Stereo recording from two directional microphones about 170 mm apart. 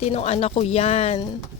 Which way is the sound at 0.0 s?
40° left (ahead or behind).